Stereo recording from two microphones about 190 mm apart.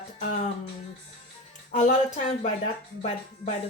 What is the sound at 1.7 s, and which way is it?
Speech, 40° left (ahead or behind).